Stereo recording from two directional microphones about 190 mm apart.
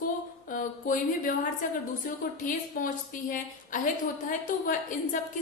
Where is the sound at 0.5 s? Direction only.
45° left (ahead or behind).